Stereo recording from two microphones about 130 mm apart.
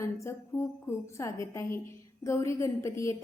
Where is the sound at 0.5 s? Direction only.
20° left (ahead or behind).